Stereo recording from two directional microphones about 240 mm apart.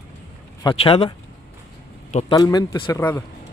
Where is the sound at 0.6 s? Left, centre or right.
Left.